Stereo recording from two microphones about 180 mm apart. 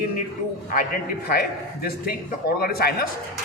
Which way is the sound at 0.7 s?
55° left (ahead or behind).